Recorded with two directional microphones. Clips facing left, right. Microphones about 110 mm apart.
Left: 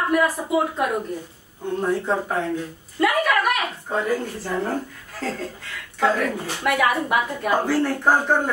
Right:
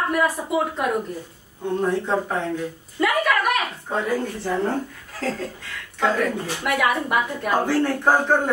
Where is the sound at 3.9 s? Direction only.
Centre (ahead or behind).